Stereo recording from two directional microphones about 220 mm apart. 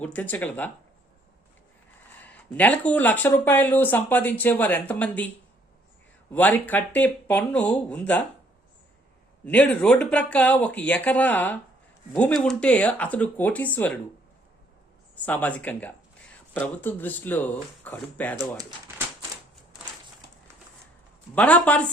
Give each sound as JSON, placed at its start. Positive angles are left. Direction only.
{"t": 0.0, "sound": "speech", "side_deg": 5}
{"t": 2.2, "sound": "speech", "side_deg": 5}
{"t": 6.7, "sound": "speech", "side_deg": 10}
{"t": 9.5, "sound": "speech", "side_deg": 5}
{"t": 15.1, "sound": "speech", "side_deg": 5}
{"t": 21.3, "sound": "speech", "side_deg": 5}